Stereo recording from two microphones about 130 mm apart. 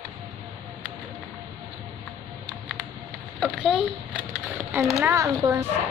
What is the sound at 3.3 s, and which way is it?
A child's voice, 5° right (ahead or behind).